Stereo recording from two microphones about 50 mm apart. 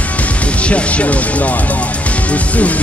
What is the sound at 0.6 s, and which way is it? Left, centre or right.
Speech, left.